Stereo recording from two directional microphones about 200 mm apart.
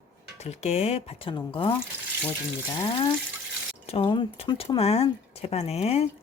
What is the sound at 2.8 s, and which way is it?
Speech, 25° left (ahead or behind).